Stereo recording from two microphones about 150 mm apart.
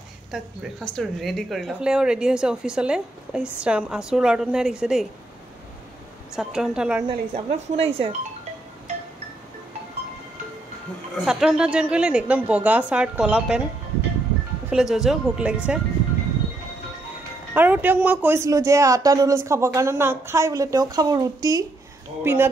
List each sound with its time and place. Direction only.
0.3 s a woman's voice: centre (ahead or behind)
6.3 s a woman's voice: 5° right (ahead or behind)
7.1 s speech: 40° right (ahead or behind)
11.2 s a woman's voice: 5° right (ahead or behind)
14.7 s a woman's voice: 5° right (ahead or behind)
17.6 s a woman's voice: 10° right (ahead or behind)